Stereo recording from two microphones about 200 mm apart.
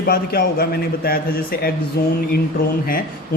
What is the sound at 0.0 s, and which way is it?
Speech, 50° left (ahead or behind).